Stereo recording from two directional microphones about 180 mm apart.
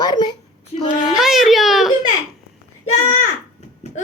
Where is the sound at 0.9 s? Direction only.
5° right (ahead or behind).